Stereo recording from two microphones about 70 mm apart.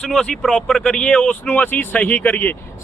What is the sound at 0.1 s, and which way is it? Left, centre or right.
A man's voice, centre.